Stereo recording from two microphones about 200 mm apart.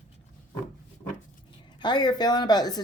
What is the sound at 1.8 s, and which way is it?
Speech, 20° left (ahead or behind).